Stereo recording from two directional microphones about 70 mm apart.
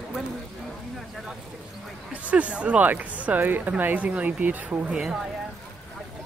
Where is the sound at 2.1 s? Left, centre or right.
Centre.